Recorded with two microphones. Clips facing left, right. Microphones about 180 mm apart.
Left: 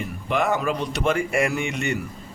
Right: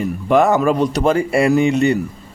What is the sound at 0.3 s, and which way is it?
Speech, 45° right (ahead or behind).